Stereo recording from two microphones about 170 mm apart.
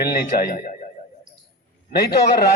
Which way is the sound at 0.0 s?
60° left (ahead or behind).